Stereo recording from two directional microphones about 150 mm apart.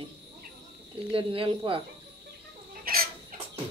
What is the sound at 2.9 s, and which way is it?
Chicken, 75° right (ahead or behind).